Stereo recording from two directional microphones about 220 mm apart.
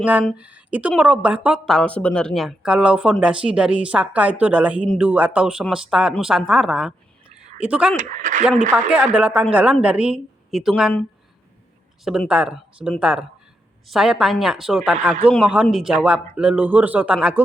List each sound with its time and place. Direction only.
0.0 s speech: 5° right (ahead or behind)
7.9 s speech: 35° right (ahead or behind)
8.9 s speech: 5° right (ahead or behind)
12.0 s speech: centre (ahead or behind)